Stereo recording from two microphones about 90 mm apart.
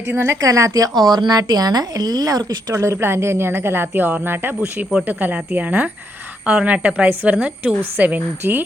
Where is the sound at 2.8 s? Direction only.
30° right (ahead or behind).